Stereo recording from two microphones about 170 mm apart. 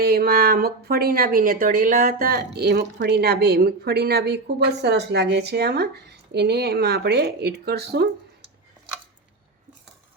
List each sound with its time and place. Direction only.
0.0 s speech: 65° right (ahead or behind)